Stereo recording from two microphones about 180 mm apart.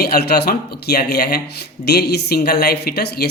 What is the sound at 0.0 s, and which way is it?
Speech, 60° left (ahead or behind).